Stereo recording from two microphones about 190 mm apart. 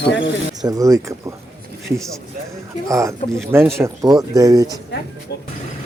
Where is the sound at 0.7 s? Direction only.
20° right (ahead or behind).